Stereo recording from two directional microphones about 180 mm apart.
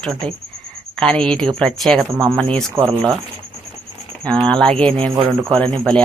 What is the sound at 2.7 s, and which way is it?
Speech, 20° right (ahead or behind).